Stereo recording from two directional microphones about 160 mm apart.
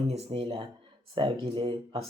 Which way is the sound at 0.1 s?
35° right (ahead or behind).